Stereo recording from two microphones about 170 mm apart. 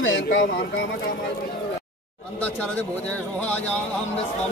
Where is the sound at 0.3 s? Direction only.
90° left.